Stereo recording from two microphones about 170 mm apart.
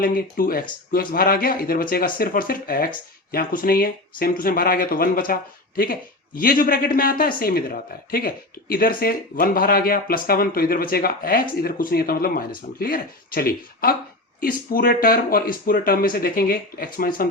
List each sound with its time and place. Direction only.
0.0 s speech: 55° left (ahead or behind)